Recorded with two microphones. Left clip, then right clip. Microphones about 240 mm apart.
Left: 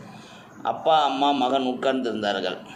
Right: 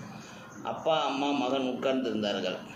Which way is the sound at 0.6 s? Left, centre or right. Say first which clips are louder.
Left 8 dB; left.